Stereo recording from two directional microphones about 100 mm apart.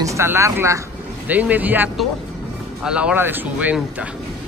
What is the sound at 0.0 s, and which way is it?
Speech, 30° right (ahead or behind).